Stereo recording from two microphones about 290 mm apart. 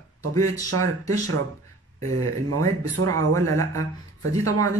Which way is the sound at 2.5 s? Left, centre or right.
Right.